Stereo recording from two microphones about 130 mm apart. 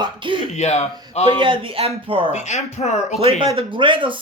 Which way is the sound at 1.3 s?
40° right (ahead or behind).